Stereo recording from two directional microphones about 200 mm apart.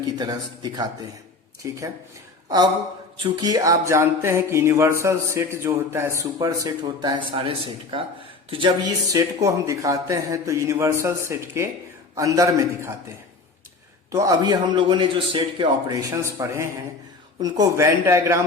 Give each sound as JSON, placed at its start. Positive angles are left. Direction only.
{"t": 0.0, "sound": "a man's voice", "side_deg": -20}
{"t": 3.3, "sound": "a man's voice", "side_deg": -20}
{"t": 14.1, "sound": "a man's voice", "side_deg": -15}